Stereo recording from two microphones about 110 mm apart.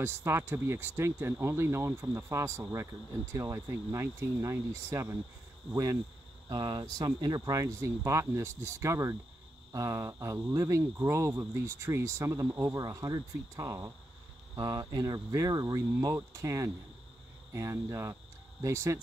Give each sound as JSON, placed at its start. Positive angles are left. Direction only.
{"t": 0.0, "sound": "speech", "side_deg": -25}